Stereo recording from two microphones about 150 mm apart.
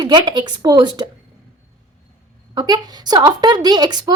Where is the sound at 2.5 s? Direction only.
25° right (ahead or behind).